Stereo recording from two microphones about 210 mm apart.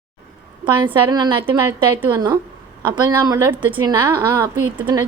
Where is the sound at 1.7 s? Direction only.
10° right (ahead or behind).